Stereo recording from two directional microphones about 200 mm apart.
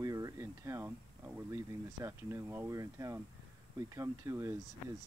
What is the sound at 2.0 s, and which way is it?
Speech, 15° right (ahead or behind).